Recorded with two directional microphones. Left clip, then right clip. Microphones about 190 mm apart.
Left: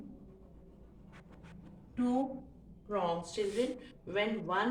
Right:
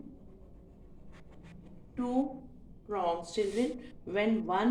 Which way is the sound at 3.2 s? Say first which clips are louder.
Right 2 dB; 45° right (ahead or behind).